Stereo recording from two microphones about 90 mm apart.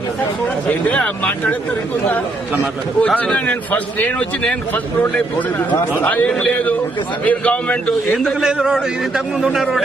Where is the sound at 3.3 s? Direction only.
15° left (ahead or behind).